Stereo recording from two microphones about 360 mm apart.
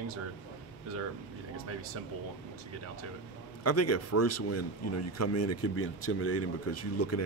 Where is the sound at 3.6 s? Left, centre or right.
Left.